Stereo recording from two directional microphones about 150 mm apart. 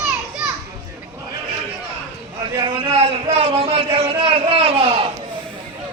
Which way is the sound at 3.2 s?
40° right (ahead or behind).